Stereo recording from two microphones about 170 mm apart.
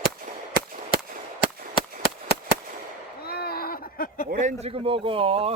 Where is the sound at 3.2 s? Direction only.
65° left (ahead or behind).